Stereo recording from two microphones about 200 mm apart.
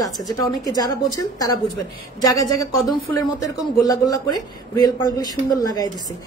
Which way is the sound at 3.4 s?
15° left (ahead or behind).